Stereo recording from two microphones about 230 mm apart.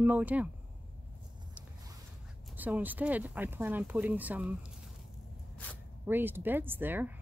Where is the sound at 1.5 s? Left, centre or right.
Centre.